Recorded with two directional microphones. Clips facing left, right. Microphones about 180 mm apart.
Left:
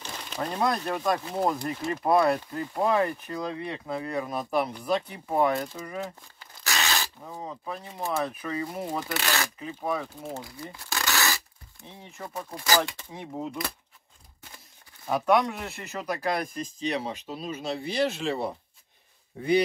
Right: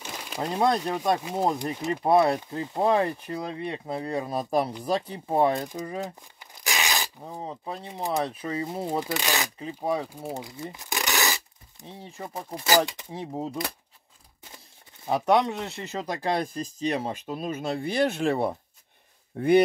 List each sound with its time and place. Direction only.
0.0 s a sound: 10° right (ahead or behind)
0.4 s speech: 20° right (ahead or behind)
6.4 s rub: 15° right (ahead or behind)
7.2 s speech: 30° right (ahead or behind)
9.6 s speech: 30° right (ahead or behind)
10.0 s speech: 15° right (ahead or behind)
10.7 s rub: 15° right (ahead or behind)
12.0 s speech: 30° right (ahead or behind)
13.1 s speech: 35° right (ahead or behind)
15.0 s speech: 25° right (ahead or behind); by 19.5 s 60° right (ahead or behind)